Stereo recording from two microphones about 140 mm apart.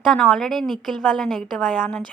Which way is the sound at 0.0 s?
5° left (ahead or behind).